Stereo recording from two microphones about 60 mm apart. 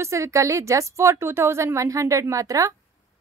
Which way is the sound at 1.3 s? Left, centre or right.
Right.